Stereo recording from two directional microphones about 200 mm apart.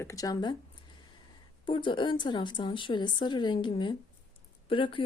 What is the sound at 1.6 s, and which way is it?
Speech, 25° left (ahead or behind).